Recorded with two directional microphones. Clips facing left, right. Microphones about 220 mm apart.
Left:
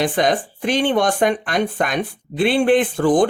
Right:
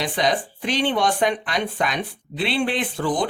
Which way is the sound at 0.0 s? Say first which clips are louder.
Left 4 dB; 50° left (ahead or behind).